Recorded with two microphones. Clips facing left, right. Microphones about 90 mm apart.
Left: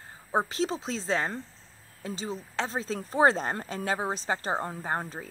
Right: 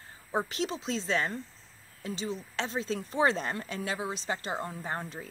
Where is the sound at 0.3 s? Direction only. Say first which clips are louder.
Left 4 dB; 30° left (ahead or behind).